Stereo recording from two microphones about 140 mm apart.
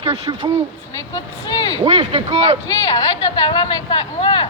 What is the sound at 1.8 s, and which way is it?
Speech, 40° right (ahead or behind).